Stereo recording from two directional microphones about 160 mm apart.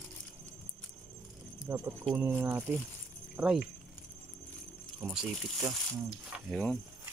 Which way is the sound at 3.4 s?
5° right (ahead or behind).